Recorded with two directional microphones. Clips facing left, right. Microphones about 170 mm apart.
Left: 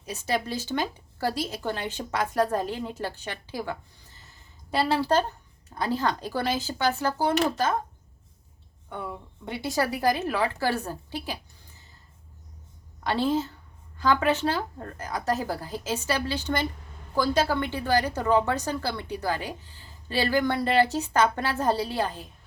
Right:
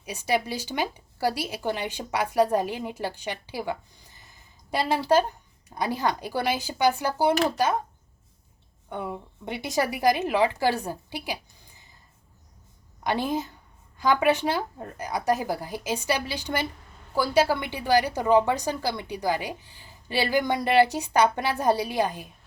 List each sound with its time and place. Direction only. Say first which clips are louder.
0.0 s speech: right 2 dB; 10° right (ahead or behind)
8.9 s a woman's voice: right 3 dB; 20° right (ahead or behind)
13.1 s speech: left 2 dB; 15° right (ahead or behind)